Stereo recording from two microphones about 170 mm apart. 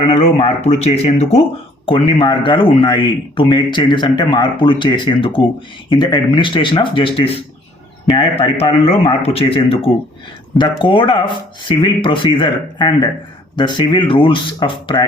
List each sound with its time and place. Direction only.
0.3 s speech: 40° left (ahead or behind)